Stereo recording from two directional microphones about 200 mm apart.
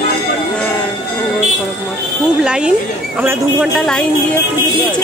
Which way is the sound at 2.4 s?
5° right (ahead or behind).